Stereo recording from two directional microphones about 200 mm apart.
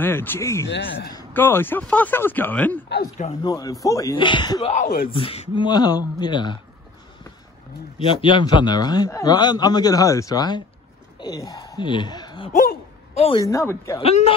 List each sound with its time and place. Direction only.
0.0 s speech: 10° left (ahead or behind)
0.7 s speech: 60° left (ahead or behind)
1.1 s a man's voice: 10° left (ahead or behind)
8.1 s a man's voice: 25° left (ahead or behind)
12.5 s a sound: 35° left (ahead or behind)
13.5 s speech: 15° left (ahead or behind)
13.9 s a man's voice: 30° left (ahead or behind)